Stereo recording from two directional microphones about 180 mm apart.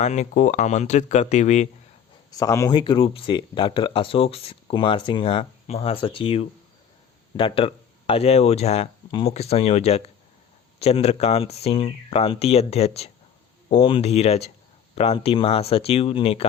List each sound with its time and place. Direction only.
0.0 s speech: 40° left (ahead or behind)
2.3 s speech: 20° left (ahead or behind)